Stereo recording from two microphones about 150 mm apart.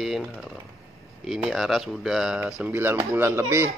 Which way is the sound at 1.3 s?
Centre (ahead or behind).